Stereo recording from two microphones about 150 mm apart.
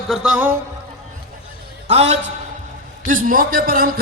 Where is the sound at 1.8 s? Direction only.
45° right (ahead or behind).